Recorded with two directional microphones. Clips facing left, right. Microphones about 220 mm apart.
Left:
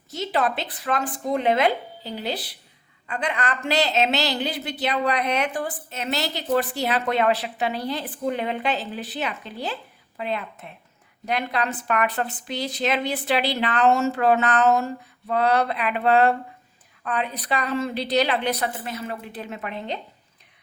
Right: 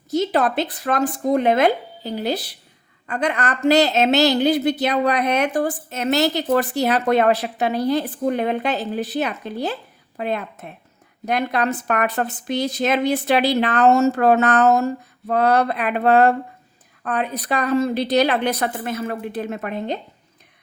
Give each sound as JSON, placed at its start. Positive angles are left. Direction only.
{"t": 0.1, "sound": "a woman's voice", "side_deg": -40}